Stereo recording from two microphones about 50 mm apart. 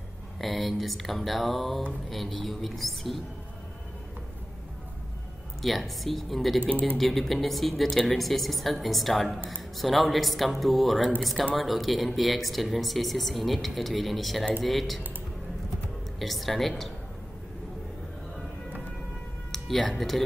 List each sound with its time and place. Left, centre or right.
0.4 s speech: centre
5.6 s speech: centre
16.2 s speech: centre
19.5 s speech: centre